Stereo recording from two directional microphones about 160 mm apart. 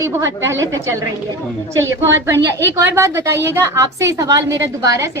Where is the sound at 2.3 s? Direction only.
15° right (ahead or behind).